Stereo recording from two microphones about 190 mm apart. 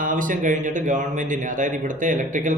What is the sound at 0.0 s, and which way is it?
Speech, 45° right (ahead or behind).